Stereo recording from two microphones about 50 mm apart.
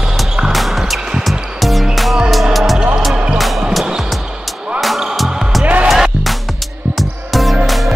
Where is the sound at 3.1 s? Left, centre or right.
Right.